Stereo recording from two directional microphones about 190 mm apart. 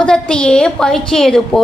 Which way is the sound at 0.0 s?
5° left (ahead or behind).